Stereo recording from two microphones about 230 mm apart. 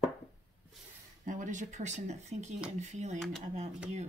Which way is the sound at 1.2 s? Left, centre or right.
Right.